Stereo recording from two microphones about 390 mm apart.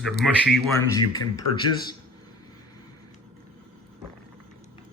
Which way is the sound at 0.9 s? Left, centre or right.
Centre.